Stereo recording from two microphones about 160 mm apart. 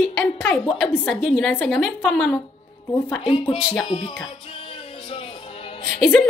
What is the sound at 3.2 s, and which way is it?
Speech, 35° left (ahead or behind).